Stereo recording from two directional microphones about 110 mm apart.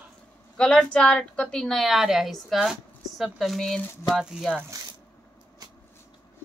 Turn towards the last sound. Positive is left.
turn(degrees=0)  # may be behind; listen again after turning